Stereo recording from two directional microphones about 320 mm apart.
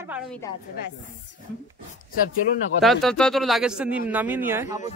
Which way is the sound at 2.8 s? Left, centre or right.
Centre.